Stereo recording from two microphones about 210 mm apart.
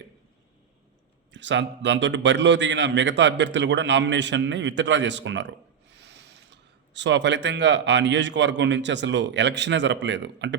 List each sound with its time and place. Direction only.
1.3 s a man's voice: 60° right (ahead or behind)